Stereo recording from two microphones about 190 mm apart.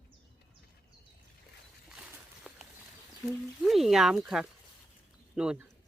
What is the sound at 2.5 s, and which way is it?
Horse, 5° right (ahead or behind).